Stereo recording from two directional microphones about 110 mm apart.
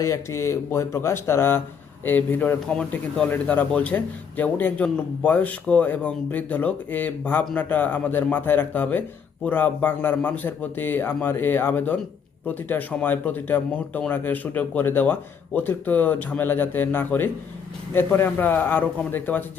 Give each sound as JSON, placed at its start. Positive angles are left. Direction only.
{"t": 0.0, "sound": "a man's voice", "side_deg": 25}